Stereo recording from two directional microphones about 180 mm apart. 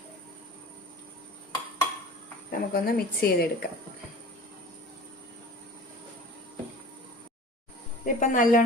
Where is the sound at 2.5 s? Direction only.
55° left (ahead or behind).